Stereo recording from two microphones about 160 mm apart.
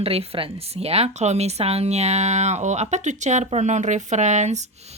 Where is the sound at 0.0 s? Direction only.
40° right (ahead or behind).